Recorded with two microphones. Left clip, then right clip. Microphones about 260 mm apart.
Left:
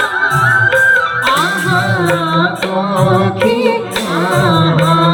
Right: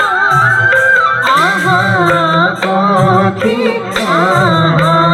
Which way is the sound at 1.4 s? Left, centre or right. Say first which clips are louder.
Right 3 dB; centre.